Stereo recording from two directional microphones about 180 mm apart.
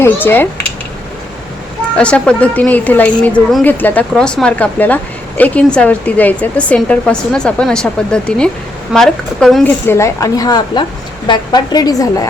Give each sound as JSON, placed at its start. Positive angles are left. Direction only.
{"t": 0.0, "sound": "speech", "side_deg": 10}
{"t": 2.0, "sound": "speech", "side_deg": 5}
{"t": 9.8, "sound": "speech", "side_deg": 15}